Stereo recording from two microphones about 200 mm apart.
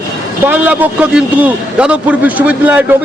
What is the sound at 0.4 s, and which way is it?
A man's voice, 10° right (ahead or behind).